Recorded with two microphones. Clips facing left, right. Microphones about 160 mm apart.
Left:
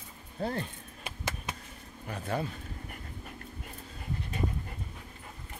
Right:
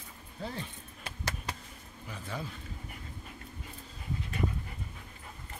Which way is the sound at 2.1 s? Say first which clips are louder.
Left 7 dB; 55° left (ahead or behind).